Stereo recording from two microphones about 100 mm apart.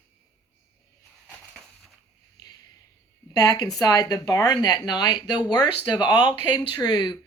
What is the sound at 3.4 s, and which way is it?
A woman's voice, 40° left (ahead or behind).